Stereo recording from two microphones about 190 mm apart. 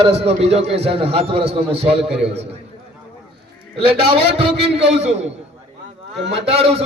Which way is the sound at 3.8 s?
30° right (ahead or behind).